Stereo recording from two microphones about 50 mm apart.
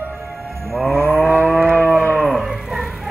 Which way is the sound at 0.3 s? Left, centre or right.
Centre.